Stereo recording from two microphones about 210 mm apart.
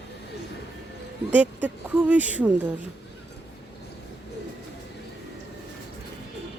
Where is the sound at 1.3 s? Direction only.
5° right (ahead or behind).